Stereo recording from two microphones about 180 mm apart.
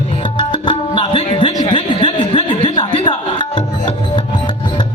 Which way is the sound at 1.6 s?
25° left (ahead or behind).